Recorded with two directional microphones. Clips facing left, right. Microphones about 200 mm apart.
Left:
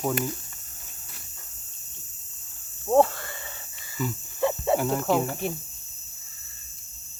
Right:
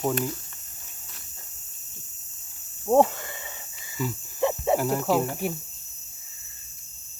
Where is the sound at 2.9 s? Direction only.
15° right (ahead or behind).